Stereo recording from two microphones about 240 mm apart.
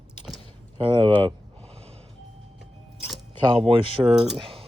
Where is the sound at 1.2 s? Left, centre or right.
Right.